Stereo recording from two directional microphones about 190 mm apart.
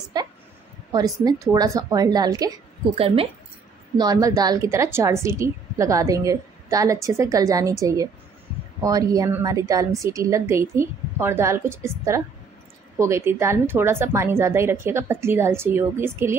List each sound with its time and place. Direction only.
0.9 s a woman's voice: 20° right (ahead or behind)
2.9 s a woman's voice: 30° right (ahead or behind)
3.9 s a woman's voice: 20° right (ahead or behind)